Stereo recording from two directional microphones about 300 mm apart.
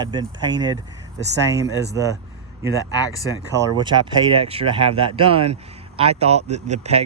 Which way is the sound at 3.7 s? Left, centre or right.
Centre.